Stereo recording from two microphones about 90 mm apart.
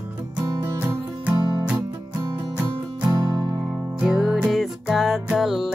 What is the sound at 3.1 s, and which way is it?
Music, 40° right (ahead or behind).